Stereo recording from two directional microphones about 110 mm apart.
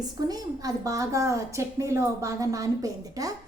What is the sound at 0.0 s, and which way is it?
A woman's voice, 35° right (ahead or behind).